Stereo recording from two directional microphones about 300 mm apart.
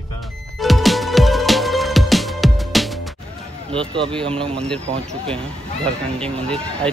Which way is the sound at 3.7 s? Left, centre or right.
Centre.